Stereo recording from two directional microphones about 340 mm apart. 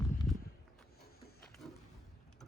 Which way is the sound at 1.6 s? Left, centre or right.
Centre.